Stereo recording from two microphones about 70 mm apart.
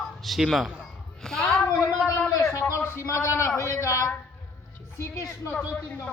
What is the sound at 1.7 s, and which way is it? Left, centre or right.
Speech, left.